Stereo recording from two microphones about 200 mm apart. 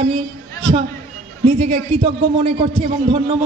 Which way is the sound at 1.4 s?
30° right (ahead or behind).